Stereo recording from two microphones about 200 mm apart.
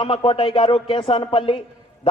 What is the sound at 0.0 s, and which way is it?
A man's voice, 25° left (ahead or behind).